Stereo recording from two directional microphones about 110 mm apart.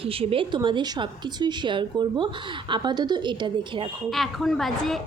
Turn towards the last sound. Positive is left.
turn(degrees=0)  # may be behind; listen again after turning